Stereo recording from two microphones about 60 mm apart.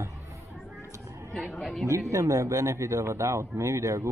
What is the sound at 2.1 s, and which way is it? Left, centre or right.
Speech, right.